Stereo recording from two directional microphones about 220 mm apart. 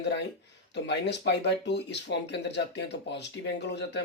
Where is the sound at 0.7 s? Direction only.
50° left (ahead or behind).